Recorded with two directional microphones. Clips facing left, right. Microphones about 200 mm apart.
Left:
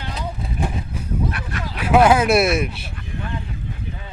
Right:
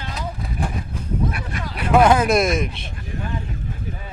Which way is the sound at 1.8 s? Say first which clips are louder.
Left 1 dB; 5° left (ahead or behind).